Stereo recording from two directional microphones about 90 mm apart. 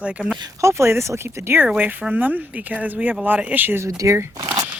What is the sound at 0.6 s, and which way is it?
Speech, 30° right (ahead or behind).